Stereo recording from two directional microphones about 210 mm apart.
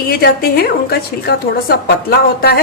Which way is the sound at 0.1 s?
45° left (ahead or behind).